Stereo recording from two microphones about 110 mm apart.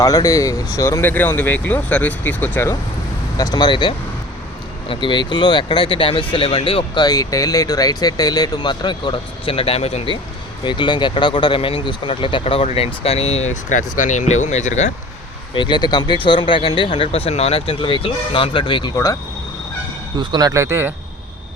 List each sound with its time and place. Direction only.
0.0 s speech: 30° left (ahead or behind)
1.0 s speech: 15° left (ahead or behind)
3.3 s speech: 35° left (ahead or behind); by 7.0 s 55° left (ahead or behind)
7.0 s speech: 35° left (ahead or behind); by 10.0 s 70° left (ahead or behind)
10.6 s speech: 45° left (ahead or behind); by 14.9 s 90° left
15.5 s speech: 45° left (ahead or behind)
20.1 s speech: 40° right (ahead or behind); by 20.9 s 20° right (ahead or behind)